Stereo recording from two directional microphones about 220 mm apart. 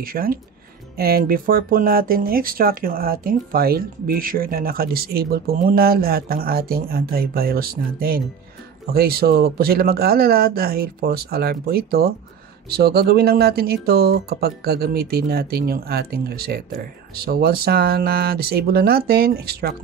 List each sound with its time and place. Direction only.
0.0 s speech: 40° right (ahead or behind)